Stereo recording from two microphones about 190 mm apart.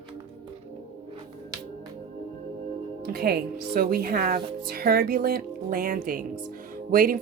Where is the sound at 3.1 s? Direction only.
55° right (ahead or behind).